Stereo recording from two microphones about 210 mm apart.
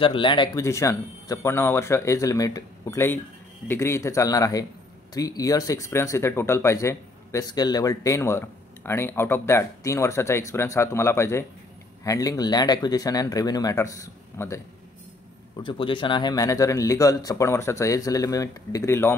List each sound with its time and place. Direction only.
0.0 s speech: 25° left (ahead or behind)
15.6 s speech: 25° left (ahead or behind)